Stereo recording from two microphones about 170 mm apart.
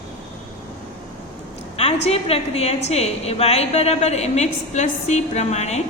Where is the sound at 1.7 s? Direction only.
35° left (ahead or behind).